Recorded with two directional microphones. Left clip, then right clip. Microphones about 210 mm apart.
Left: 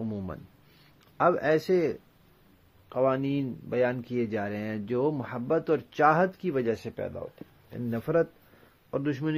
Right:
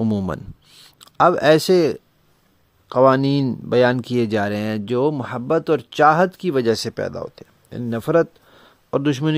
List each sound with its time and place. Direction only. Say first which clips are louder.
0.0 s a sound: right 13 dB; 50° right (ahead or behind)
1.0 s speech: right 10 dB; 55° right (ahead or behind)
2.9 s speech: right 12 dB; 60° right (ahead or behind)